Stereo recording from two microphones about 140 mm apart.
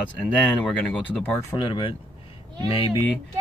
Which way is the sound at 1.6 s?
35° left (ahead or behind).